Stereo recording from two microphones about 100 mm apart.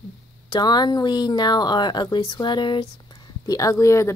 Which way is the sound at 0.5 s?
45° left (ahead or behind).